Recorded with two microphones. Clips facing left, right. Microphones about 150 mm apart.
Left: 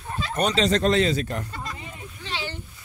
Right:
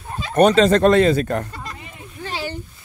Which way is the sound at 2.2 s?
45° right (ahead or behind).